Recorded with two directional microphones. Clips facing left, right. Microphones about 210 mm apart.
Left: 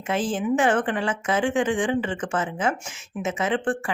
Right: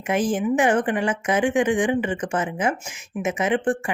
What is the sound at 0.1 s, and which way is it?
Speech, 15° right (ahead or behind).